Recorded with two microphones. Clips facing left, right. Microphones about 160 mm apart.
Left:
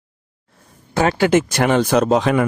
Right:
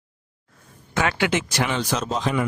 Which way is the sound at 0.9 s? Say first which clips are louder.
Left 7 dB; 35° left (ahead or behind).